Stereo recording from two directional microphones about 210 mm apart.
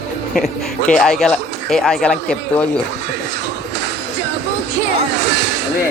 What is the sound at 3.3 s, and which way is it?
Music, 55° right (ahead or behind).